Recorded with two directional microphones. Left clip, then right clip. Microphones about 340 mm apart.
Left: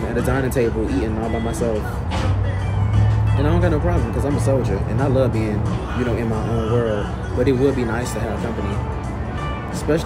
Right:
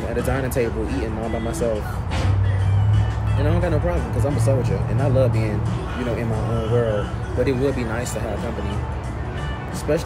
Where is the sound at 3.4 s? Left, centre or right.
Centre.